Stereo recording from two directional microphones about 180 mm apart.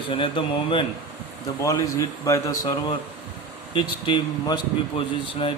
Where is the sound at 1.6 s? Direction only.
20° left (ahead or behind).